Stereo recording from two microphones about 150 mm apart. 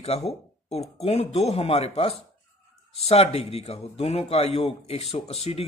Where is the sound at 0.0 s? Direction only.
45° left (ahead or behind).